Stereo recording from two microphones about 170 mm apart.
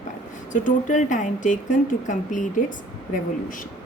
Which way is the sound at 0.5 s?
45° left (ahead or behind).